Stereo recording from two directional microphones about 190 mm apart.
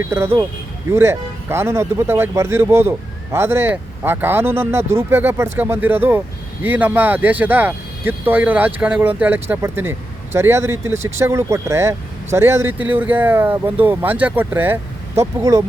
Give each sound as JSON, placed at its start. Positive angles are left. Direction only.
{"t": 0.0, "sound": "speech", "side_deg": -15}